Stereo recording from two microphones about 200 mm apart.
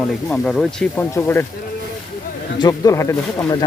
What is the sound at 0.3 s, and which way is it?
Speech, 5° left (ahead or behind).